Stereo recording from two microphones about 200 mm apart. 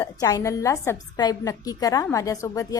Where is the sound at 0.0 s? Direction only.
20° left (ahead or behind).